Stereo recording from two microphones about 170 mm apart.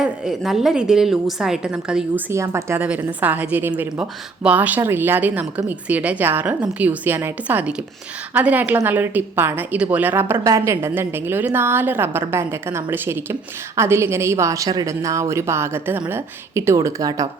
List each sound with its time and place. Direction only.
0.0 s a woman's voice: 5° right (ahead or behind)
2.3 s a woman's voice: 15° right (ahead or behind)